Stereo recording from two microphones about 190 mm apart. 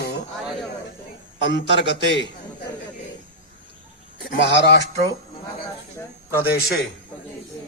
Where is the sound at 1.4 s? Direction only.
65° left (ahead or behind).